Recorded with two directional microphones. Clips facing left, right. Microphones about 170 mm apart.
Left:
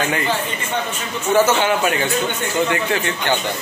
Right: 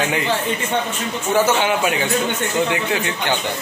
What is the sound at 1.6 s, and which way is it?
A man's voice, 10° right (ahead or behind).